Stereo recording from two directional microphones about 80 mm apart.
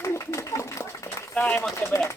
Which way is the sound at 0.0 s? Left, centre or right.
Left.